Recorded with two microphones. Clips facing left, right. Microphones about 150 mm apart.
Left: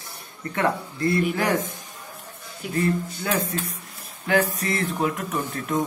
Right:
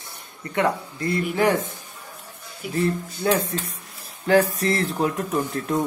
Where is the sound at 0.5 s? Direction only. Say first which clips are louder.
Right 2 dB; 20° right (ahead or behind).